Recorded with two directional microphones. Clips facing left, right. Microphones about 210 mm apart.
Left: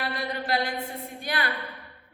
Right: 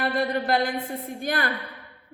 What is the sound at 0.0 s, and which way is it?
A woman's voice, 50° right (ahead or behind).